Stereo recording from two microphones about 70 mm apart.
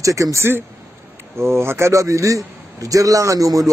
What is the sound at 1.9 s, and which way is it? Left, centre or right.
Speech, right.